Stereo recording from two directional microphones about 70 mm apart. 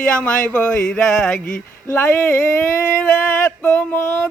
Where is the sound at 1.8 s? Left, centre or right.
Left.